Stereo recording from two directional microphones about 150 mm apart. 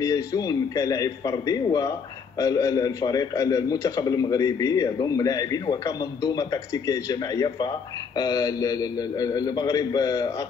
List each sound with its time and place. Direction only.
0.0 s a man's voice: 20° left (ahead or behind)